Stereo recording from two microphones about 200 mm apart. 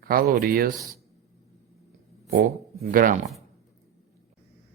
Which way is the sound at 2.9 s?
45° right (ahead or behind).